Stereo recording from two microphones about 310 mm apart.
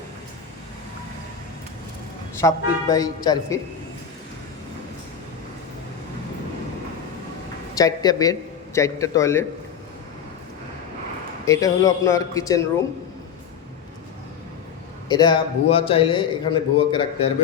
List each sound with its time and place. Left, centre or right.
2.4 s a man's voice: centre
7.8 s a man's voice: centre
11.4 s a man's voice: centre
15.1 s a man's voice: centre